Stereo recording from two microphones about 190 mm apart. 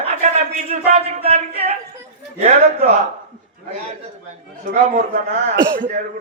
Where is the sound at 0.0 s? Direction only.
35° right (ahead or behind).